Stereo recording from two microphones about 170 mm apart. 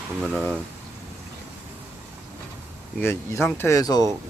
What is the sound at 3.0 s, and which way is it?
Speech, 15° left (ahead or behind).